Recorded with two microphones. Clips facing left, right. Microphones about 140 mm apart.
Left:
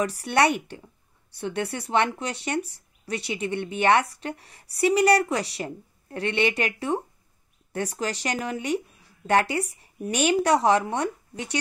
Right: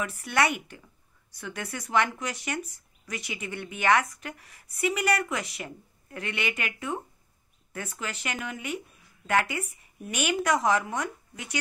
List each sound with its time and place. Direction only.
0.0 s a woman's voice: 35° left (ahead or behind)